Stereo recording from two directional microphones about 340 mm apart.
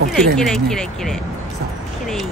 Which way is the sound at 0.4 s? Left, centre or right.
Centre.